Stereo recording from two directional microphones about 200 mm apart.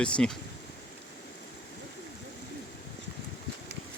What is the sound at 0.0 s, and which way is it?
Speech, 5° left (ahead or behind).